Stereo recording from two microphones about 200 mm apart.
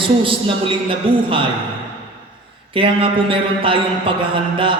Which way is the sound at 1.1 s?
25° right (ahead or behind).